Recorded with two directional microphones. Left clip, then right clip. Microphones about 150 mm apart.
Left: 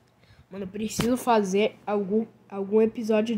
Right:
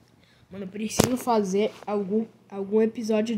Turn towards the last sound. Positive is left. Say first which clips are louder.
# left 1 dB
turn(degrees=0)  # may be behind; listen again after turning